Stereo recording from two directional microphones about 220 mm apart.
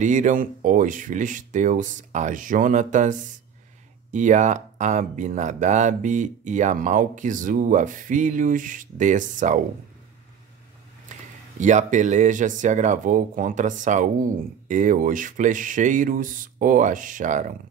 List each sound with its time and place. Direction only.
0.0 s speech: 35° right (ahead or behind)
11.1 s a sound: 35° right (ahead or behind)
11.6 s speech: 35° right (ahead or behind)